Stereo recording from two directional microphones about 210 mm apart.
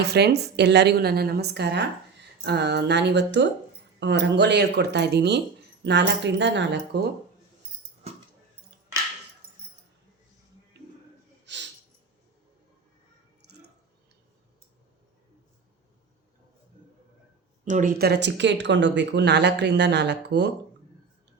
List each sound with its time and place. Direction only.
0.0 s speech: 50° right (ahead or behind)
11.4 s a sound: 55° right (ahead or behind)
17.7 s speech: 40° right (ahead or behind)